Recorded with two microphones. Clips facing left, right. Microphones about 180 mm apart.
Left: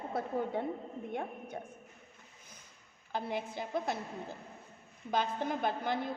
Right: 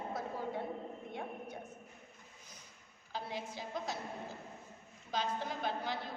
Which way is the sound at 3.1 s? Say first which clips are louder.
Left 5 dB; 55° left (ahead or behind).